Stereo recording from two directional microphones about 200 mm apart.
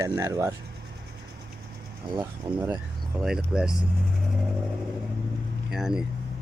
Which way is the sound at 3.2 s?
Centre (ahead or behind).